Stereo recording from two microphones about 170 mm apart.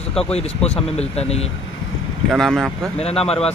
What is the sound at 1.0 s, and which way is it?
Speech, 40° left (ahead or behind).